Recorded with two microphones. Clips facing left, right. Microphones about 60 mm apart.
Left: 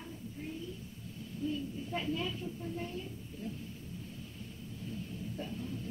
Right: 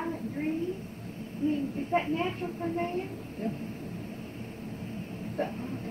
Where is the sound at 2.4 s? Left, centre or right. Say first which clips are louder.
Right 9 dB; right.